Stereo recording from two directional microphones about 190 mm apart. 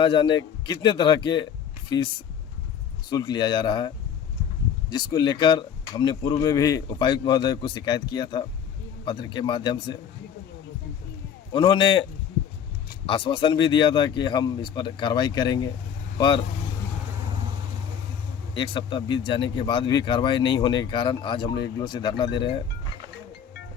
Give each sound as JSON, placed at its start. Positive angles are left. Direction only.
{"t": 0.0, "sound": "speech", "side_deg": 25}
{"t": 3.1, "sound": "speech", "side_deg": 20}
{"t": 11.5, "sound": "speech", "side_deg": 25}
{"t": 13.1, "sound": "speech", "side_deg": 25}
{"t": 18.5, "sound": "speech", "side_deg": 25}